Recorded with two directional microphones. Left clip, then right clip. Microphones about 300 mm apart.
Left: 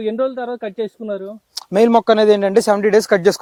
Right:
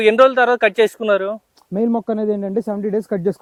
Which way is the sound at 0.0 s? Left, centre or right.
Centre.